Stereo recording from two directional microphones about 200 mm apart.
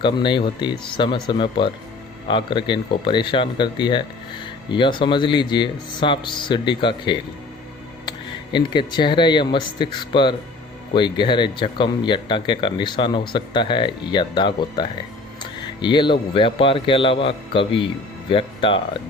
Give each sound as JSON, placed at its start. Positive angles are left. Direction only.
{"t": 0.0, "sound": "speech", "side_deg": 25}
{"t": 8.5, "sound": "speech", "side_deg": 20}